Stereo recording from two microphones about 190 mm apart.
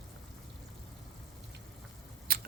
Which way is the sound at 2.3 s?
50° right (ahead or behind).